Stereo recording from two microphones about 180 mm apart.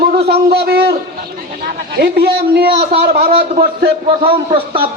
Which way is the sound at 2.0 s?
65° right (ahead or behind).